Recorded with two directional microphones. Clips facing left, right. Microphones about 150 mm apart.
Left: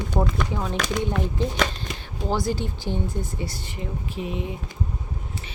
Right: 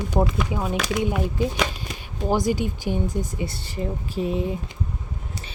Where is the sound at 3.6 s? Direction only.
35° right (ahead or behind).